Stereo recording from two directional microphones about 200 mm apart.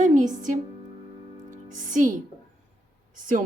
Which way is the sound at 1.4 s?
40° right (ahead or behind).